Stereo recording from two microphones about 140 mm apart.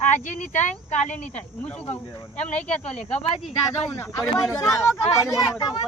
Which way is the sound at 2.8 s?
50° left (ahead or behind).